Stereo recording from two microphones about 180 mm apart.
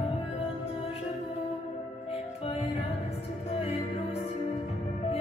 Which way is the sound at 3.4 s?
35° left (ahead or behind).